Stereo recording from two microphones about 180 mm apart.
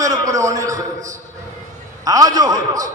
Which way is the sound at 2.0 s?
20° right (ahead or behind).